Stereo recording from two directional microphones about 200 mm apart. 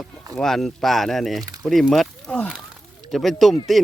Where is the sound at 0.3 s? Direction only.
Centre (ahead or behind).